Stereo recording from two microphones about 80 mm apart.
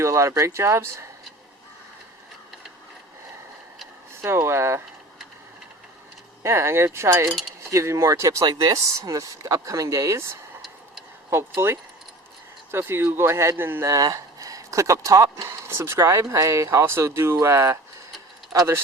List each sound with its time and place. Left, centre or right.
0.0 s speech: right
4.2 s speech: right
6.4 s speech: right
11.3 s speech: right
13.9 s speech: right
15.4 s speech: right